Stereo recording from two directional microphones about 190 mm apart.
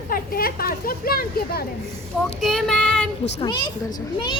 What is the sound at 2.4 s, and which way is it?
Child singing, centre (ahead or behind).